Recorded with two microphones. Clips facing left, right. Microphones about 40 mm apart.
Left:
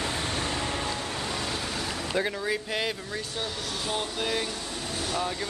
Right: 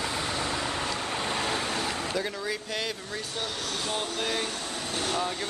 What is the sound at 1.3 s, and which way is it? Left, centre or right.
Vehicle, right.